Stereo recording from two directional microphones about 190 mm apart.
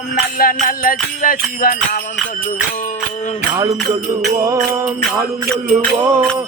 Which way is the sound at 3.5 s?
20° right (ahead or behind).